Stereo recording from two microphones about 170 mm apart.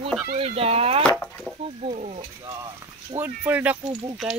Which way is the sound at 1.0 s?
5° left (ahead or behind).